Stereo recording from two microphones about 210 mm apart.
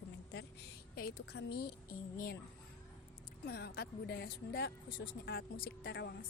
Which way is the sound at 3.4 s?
50° left (ahead or behind).